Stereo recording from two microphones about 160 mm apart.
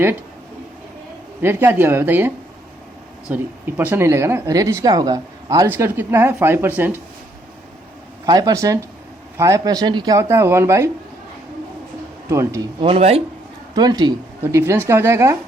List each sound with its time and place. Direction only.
1.4 s speech: 15° right (ahead or behind)
8.3 s speech: 25° right (ahead or behind)
12.3 s speech: 20° right (ahead or behind)
12.8 s speech: 40° right (ahead or behind)
13.7 s speech: 25° right (ahead or behind)